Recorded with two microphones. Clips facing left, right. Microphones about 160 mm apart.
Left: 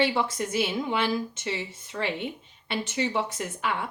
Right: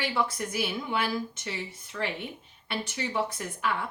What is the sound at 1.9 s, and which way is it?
Speech, 35° left (ahead or behind).